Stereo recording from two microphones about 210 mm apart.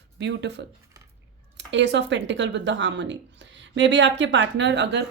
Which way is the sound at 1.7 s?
60° right (ahead or behind).